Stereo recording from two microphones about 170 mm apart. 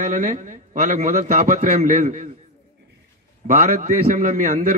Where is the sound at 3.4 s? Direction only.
45° right (ahead or behind).